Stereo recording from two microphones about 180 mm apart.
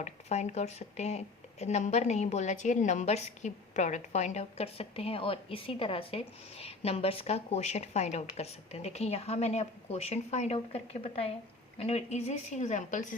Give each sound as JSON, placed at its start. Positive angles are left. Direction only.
{"t": 0.0, "sound": "speech", "side_deg": 40}